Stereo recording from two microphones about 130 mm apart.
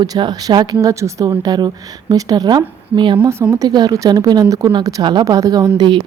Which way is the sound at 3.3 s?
20° right (ahead or behind).